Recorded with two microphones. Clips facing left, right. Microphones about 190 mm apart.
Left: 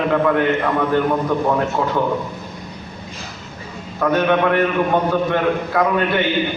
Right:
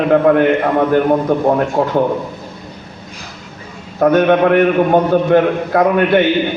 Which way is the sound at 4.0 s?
50° right (ahead or behind).